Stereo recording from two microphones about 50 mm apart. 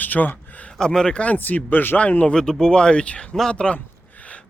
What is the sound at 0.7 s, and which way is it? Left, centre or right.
Speech, centre.